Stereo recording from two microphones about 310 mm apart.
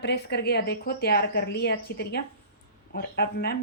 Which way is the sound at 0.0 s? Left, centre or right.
Left.